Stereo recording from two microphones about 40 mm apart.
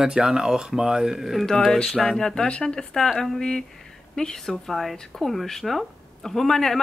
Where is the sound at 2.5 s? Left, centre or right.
Left.